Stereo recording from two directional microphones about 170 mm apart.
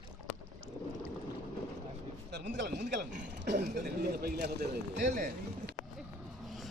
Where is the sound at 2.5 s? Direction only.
80° right.